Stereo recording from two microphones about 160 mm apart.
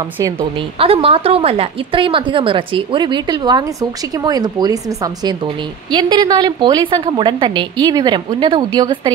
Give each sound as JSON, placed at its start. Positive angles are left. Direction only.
{"t": 0.0, "sound": "a woman's voice", "side_deg": -25}